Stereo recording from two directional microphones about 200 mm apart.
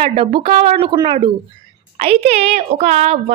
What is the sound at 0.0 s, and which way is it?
Speech, 25° right (ahead or behind).